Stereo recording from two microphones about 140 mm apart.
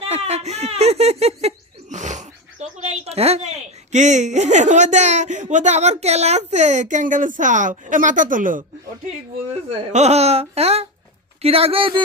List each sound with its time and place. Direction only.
0.0 s speech: 50° right (ahead or behind); by 8.6 s 70° right (ahead or behind)
9.5 s speech: 50° right (ahead or behind)